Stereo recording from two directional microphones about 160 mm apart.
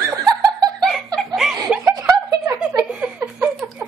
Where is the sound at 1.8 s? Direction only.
25° right (ahead or behind).